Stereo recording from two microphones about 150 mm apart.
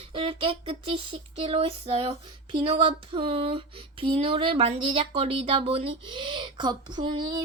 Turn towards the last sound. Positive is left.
turn(degrees=-30)  # may be behind; listen again after turning